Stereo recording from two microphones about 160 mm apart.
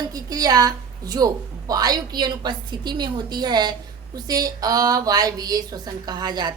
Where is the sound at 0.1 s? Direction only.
25° right (ahead or behind).